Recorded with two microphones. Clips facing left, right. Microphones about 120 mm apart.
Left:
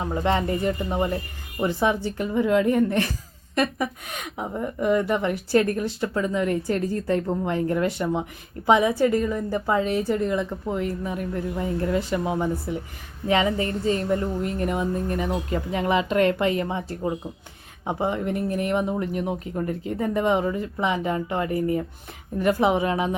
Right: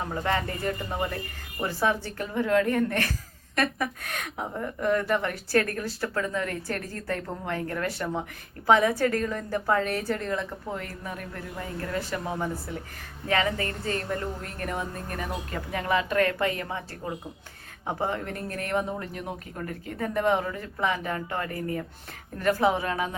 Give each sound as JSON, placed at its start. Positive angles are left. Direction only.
{"t": 0.0, "sound": "speech", "side_deg": 20}